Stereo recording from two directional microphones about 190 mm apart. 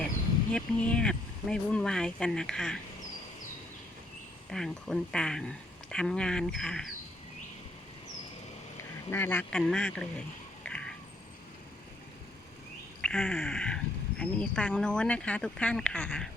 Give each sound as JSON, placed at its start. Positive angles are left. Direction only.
{"t": 0.5, "sound": "speech", "side_deg": 5}
{"t": 4.5, "sound": "speech", "side_deg": 0}
{"t": 9.0, "sound": "speech", "side_deg": 10}
{"t": 13.0, "sound": "speech", "side_deg": 5}